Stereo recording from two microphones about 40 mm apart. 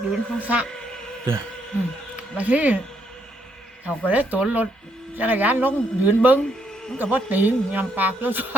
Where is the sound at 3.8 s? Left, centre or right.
Right.